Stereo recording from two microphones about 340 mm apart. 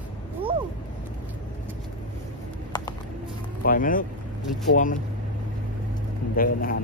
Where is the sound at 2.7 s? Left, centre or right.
Centre.